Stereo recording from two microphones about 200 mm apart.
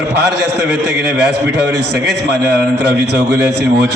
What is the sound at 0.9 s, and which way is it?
A man's voice, 55° right (ahead or behind).